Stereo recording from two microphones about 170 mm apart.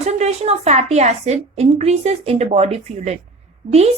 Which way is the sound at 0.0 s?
40° right (ahead or behind).